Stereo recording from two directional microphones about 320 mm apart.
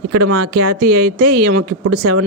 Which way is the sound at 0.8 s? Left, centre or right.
Right.